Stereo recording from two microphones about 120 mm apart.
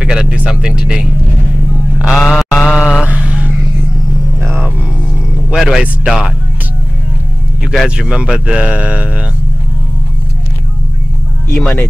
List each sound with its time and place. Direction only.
0.0 s speech: 5° right (ahead or behind)
2.0 s vehicle: 5° right (ahead or behind)
4.4 s a sound: 20° right (ahead or behind)
5.5 s speech: 5° right (ahead or behind)
7.6 s speech: centre (ahead or behind)
11.6 s speech: 10° left (ahead or behind)